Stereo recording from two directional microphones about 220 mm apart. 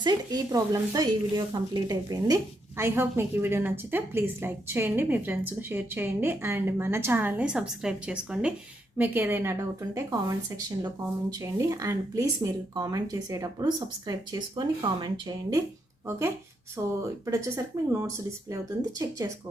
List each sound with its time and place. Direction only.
0.0 s speech: 15° right (ahead or behind)
19.2 s speech: 15° right (ahead or behind)